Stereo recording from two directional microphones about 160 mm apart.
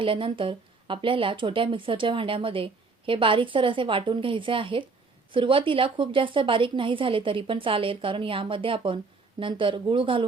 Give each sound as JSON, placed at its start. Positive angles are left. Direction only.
{"t": 0.0, "sound": "a woman's voice", "side_deg": -30}